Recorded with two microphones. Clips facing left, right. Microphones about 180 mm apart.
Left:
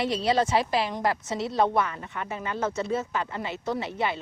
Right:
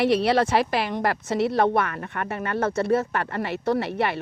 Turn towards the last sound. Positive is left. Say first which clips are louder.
# right 5 dB
turn(degrees=-65)  # may be behind; listen again after turning